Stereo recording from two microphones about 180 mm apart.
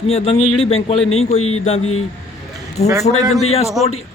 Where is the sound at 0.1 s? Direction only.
35° left (ahead or behind).